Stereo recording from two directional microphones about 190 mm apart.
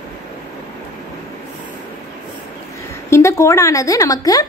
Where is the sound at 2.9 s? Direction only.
15° left (ahead or behind).